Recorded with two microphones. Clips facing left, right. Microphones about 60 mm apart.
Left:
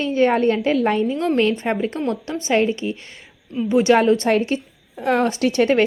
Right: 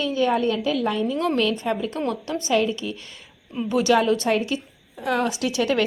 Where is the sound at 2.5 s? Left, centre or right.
Left.